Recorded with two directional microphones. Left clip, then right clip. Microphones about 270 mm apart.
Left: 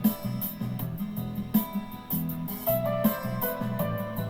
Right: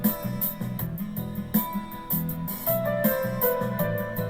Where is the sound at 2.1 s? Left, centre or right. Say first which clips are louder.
Right 1 dB; right.